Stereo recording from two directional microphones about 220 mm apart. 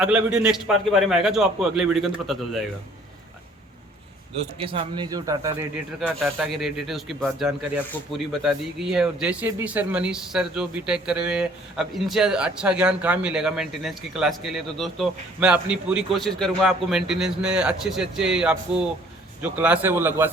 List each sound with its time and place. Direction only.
0.0 s a man's voice: 5° right (ahead or behind)
4.4 s a man's voice: 25° right (ahead or behind)
6.0 s a man's voice: centre (ahead or behind)